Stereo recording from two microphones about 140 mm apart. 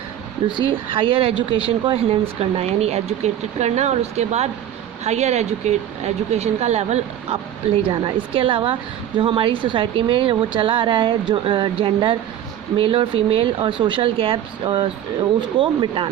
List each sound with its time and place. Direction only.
0.7 s speech: 40° right (ahead or behind)
7.8 s speech: 40° right (ahead or behind)